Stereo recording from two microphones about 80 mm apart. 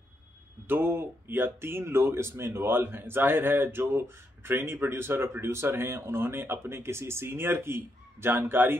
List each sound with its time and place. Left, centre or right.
0.7 s speech: right